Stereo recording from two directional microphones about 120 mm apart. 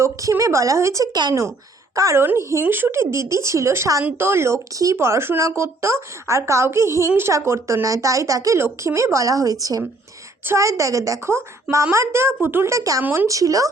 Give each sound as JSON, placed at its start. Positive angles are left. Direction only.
{"t": 0.0, "sound": "speech", "side_deg": -25}
{"t": 13.2, "sound": "speech", "side_deg": -30}